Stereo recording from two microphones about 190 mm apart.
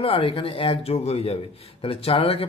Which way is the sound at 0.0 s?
30° left (ahead or behind).